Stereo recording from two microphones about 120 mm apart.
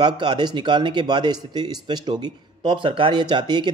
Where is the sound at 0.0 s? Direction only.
40° right (ahead or behind).